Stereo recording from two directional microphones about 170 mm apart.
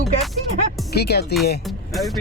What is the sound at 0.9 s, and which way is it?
Speech, 70° left (ahead or behind).